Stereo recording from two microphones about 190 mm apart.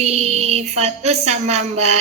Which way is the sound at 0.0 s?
35° right (ahead or behind).